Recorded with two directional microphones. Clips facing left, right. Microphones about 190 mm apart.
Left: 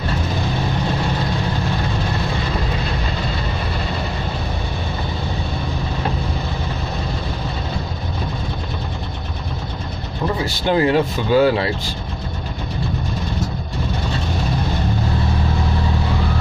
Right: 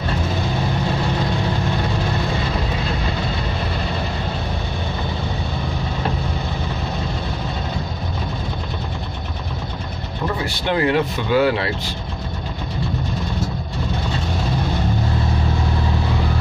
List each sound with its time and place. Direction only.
10.7 s speech: 35° left (ahead or behind)